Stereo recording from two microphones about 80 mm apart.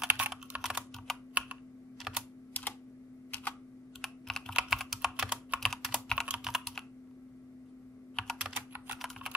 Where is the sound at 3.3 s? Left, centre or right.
Left.